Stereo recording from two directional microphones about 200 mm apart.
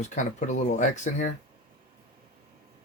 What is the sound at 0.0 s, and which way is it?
Speech, 40° left (ahead or behind).